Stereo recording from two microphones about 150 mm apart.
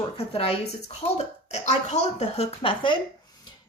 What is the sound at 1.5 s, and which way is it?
A woman's voice, 50° left (ahead or behind).